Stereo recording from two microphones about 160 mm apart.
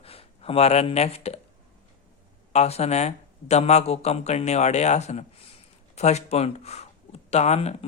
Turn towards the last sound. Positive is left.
turn(degrees=40)  # may be behind; listen again after turning